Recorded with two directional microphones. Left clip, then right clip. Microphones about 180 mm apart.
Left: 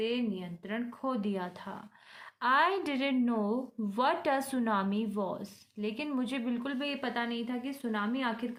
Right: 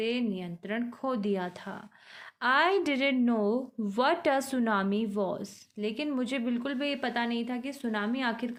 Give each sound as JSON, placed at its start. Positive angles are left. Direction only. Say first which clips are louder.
{"t": 0.0, "sound": "a woman's voice", "louder": "right 2 dB", "side_deg": -45}